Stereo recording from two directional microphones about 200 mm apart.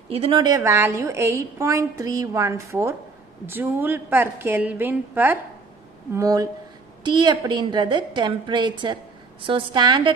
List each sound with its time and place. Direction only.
0.1 s a woman's voice: 25° right (ahead or behind)